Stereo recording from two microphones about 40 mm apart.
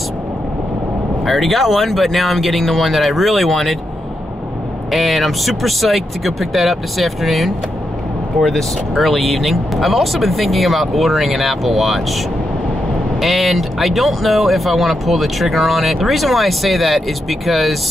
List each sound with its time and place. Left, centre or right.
1.2 s speech: centre
4.9 s speech: centre
13.2 s speech: centre